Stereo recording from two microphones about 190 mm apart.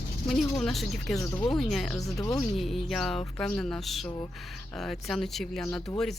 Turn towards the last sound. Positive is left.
turn(degrees=5)  # may be behind; listen again after turning